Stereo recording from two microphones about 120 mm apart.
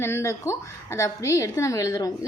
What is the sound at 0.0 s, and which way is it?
A woman's voice, 25° left (ahead or behind).